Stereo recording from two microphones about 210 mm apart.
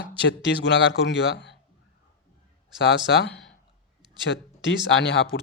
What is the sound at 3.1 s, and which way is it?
Speech, 55° left (ahead or behind).